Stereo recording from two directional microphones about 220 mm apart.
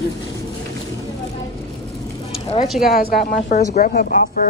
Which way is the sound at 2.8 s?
45° left (ahead or behind).